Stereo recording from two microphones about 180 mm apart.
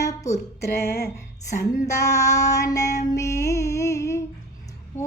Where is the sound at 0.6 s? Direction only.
60° left (ahead or behind).